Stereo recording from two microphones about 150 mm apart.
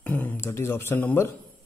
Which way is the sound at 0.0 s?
10° left (ahead or behind).